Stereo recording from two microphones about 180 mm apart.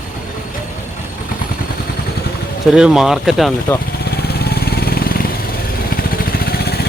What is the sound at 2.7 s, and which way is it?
Speech, 5° right (ahead or behind).